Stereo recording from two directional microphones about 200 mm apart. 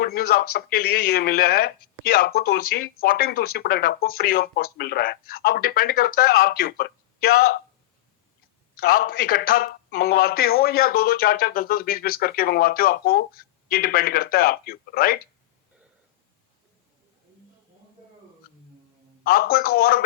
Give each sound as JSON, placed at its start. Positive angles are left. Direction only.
{"t": 0.0, "sound": "a man's voice", "side_deg": 50}
{"t": 8.7, "sound": "a man's voice", "side_deg": 45}
{"t": 19.2, "sound": "a man's voice", "side_deg": 45}